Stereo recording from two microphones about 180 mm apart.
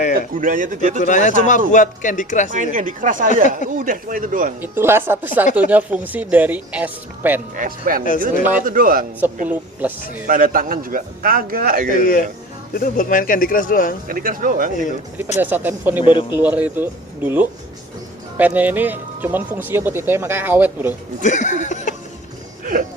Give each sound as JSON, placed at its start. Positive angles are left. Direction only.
{"t": 0.3, "sound": "a man's voice", "side_deg": -50}
{"t": 0.9, "sound": "speech", "side_deg": 45}
{"t": 2.5, "sound": "a man's voice", "side_deg": -45}
{"t": 4.6, "sound": "speech", "side_deg": -10}
{"t": 7.5, "sound": "a man's voice", "side_deg": -50}
{"t": 10.2, "sound": "a man's voice", "side_deg": -50}
{"t": 11.9, "sound": "speech", "side_deg": 50}
{"t": 14.1, "sound": "a man's voice", "side_deg": -50}
{"t": 15.4, "sound": "speech", "side_deg": -10}
{"t": 21.2, "sound": "speech", "side_deg": 40}
{"t": 22.6, "sound": "speech", "side_deg": -50}